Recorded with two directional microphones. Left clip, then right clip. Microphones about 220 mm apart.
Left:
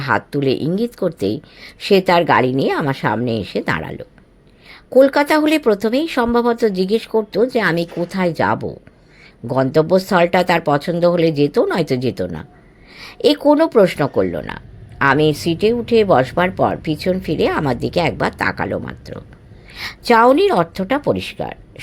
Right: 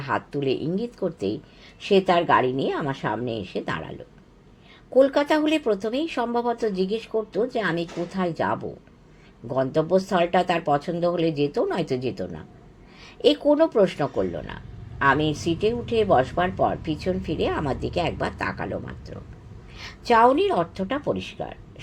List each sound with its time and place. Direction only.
0.0 s speech: 40° left (ahead or behind)